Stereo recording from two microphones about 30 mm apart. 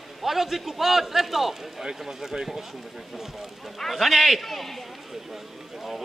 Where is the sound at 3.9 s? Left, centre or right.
Centre.